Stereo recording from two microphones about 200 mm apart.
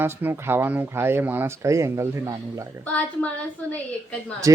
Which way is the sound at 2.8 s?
5° left (ahead or behind).